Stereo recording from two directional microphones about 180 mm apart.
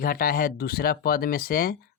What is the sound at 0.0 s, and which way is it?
Speech, 50° left (ahead or behind).